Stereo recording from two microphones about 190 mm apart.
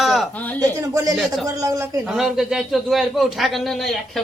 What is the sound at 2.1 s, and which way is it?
A man's voice, centre (ahead or behind).